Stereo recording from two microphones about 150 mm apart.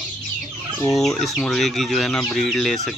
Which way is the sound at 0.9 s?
Centre (ahead or behind).